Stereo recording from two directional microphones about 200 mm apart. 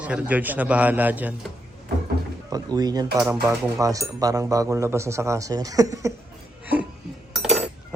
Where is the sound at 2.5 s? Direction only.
20° right (ahead or behind).